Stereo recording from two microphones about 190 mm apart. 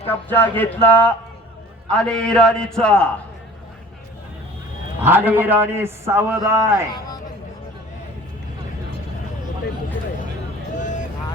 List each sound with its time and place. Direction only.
0.1 s a man's voice: 10° left (ahead or behind)
5.0 s a man's voice: 10° right (ahead or behind)
10.8 s vehicle: 40° left (ahead or behind)